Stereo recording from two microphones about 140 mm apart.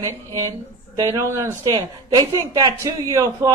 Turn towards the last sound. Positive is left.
turn(degrees=-25)  # may be behind; listen again after turning